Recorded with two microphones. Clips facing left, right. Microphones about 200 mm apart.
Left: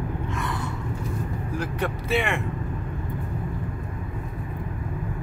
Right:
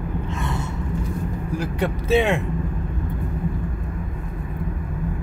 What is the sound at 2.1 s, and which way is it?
Speech, 20° right (ahead or behind).